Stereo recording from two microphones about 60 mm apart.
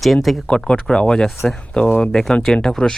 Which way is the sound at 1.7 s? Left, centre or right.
Centre.